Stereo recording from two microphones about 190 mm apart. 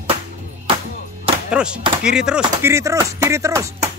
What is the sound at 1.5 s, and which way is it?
Speech, 5° right (ahead or behind).